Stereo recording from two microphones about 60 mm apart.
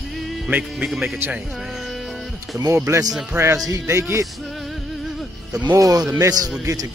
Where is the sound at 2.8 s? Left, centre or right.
Right.